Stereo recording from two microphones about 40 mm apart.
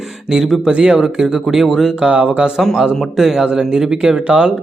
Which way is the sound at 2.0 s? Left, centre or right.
Right.